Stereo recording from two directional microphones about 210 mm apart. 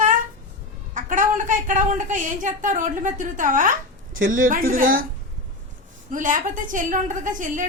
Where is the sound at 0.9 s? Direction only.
35° right (ahead or behind).